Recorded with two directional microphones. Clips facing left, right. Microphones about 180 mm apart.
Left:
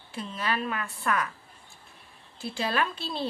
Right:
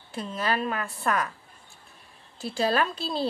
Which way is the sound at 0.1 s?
40° right (ahead or behind).